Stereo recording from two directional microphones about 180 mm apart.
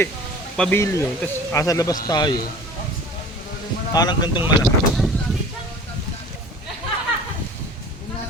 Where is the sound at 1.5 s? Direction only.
20° left (ahead or behind).